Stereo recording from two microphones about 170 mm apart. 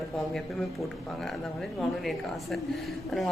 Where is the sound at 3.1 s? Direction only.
Centre (ahead or behind).